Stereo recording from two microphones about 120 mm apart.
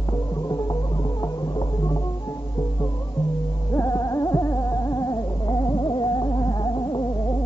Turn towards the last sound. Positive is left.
turn(degrees=35)  # may be behind; listen again after turning